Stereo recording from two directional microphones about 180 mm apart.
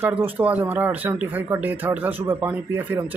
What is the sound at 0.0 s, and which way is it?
Speech, 10° right (ahead or behind).